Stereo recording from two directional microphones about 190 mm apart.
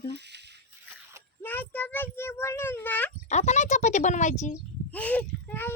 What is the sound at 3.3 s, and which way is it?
Speech, 35° left (ahead or behind).